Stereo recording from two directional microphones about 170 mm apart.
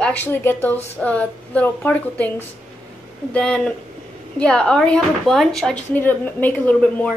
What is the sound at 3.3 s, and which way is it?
A woman's voice, 5° left (ahead or behind).